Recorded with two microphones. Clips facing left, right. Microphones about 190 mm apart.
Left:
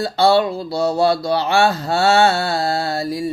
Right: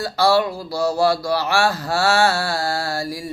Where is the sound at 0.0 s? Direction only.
25° left (ahead or behind).